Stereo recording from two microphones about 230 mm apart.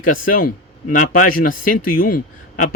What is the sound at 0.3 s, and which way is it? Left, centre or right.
Speech, left.